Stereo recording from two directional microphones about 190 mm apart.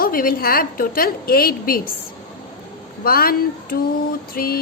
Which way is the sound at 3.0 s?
50° left (ahead or behind).